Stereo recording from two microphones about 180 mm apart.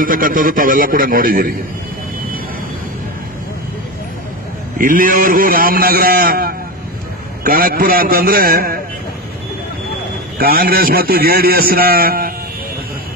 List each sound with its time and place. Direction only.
0.0 s a man's voice: 50° right (ahead or behind)
4.7 s a man's voice: 50° right (ahead or behind)
10.4 s a man's voice: 55° right (ahead or behind)